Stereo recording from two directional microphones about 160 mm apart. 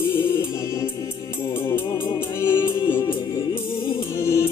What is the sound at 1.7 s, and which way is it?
Music, 20° left (ahead or behind).